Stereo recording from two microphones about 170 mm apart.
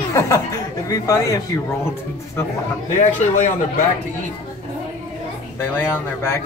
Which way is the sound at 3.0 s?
45° left (ahead or behind).